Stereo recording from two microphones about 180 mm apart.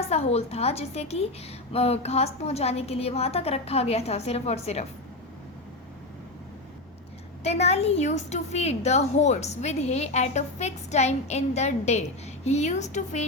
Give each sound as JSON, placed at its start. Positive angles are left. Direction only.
{"t": 0.0, "sound": "a woman's voice", "side_deg": 35}
{"t": 7.4, "sound": "a woman's voice", "side_deg": 35}